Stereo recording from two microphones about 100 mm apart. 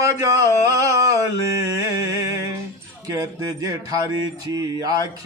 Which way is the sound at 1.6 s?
35° right (ahead or behind).